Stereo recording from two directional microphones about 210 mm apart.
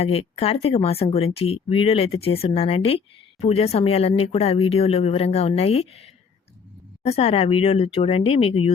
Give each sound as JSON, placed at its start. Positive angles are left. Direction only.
{"t": 0.0, "sound": "speech", "side_deg": 30}
{"t": 7.0, "sound": "speech", "side_deg": 30}